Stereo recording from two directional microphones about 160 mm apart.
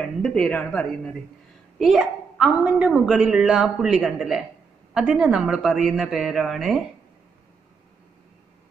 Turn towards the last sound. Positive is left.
turn(degrees=0)  # may be behind; listen again after turning